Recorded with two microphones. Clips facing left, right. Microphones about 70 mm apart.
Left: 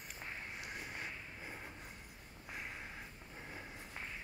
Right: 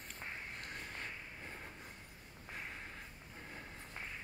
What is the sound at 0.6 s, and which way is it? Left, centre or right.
Vehicle, centre.